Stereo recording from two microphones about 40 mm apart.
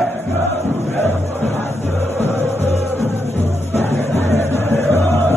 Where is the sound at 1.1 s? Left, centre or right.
Left.